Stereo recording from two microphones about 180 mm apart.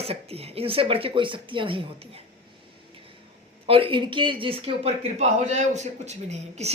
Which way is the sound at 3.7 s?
30° right (ahead or behind).